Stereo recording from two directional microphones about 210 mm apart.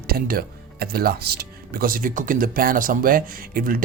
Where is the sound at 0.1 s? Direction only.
45° right (ahead or behind).